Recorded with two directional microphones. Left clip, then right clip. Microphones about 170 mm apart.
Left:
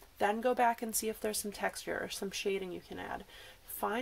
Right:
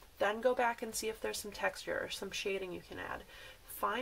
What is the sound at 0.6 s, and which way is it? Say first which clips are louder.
Speech: left 4 dB; 40° left (ahead or behind).